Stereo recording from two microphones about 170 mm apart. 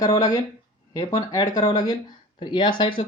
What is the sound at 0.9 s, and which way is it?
Speech, 20° left (ahead or behind).